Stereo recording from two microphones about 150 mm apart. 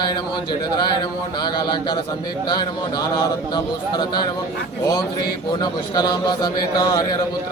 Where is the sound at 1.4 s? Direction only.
30° left (ahead or behind).